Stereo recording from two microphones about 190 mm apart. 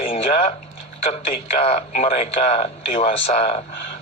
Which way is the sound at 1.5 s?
35° left (ahead or behind).